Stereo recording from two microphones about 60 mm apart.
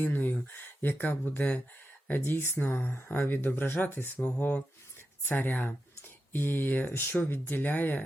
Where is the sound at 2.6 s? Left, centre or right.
Left.